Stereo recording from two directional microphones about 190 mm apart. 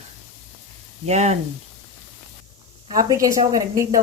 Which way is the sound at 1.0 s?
35° right (ahead or behind).